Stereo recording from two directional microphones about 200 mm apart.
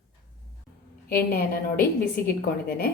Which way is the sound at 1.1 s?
50° left (ahead or behind).